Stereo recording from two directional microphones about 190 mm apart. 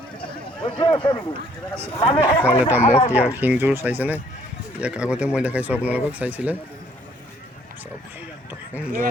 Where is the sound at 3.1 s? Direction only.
5° right (ahead or behind).